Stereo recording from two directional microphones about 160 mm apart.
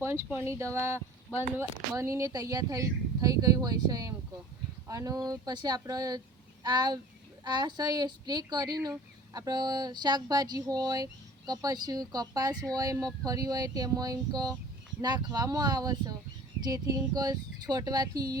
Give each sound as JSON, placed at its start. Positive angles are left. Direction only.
{"t": 0.0, "sound": "speech", "side_deg": -15}